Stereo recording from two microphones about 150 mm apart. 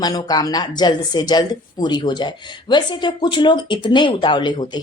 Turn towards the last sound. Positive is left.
turn(degrees=30)  # may be behind; listen again after turning